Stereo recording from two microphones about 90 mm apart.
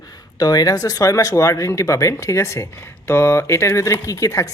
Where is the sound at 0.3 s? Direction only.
45° left (ahead or behind).